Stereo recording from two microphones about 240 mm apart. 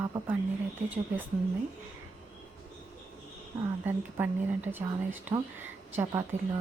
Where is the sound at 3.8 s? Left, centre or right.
Centre.